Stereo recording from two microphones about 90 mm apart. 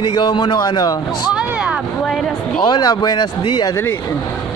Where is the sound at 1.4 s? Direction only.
15° right (ahead or behind).